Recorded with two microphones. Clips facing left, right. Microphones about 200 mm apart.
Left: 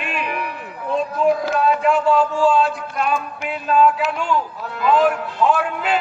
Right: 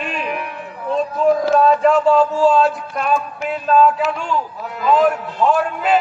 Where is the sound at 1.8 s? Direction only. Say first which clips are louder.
Right 3 dB; 40° right (ahead or behind).